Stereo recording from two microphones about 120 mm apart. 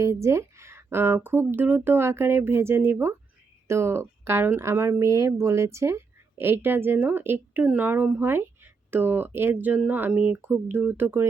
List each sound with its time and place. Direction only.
0.0 s speech: 25° right (ahead or behind)